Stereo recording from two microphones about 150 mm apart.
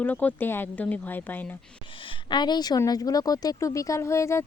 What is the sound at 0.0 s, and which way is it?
Speech, 10° left (ahead or behind).